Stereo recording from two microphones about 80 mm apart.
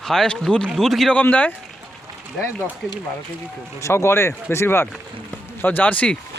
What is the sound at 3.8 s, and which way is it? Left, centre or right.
Speech, left.